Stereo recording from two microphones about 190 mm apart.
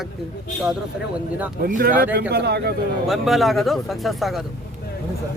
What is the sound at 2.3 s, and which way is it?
Speech, 60° right (ahead or behind).